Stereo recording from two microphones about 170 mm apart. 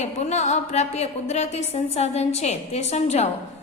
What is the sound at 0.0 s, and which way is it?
A woman's voice, 40° left (ahead or behind).